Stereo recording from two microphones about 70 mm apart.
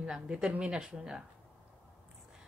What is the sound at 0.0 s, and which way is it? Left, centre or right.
A woman's voice, centre.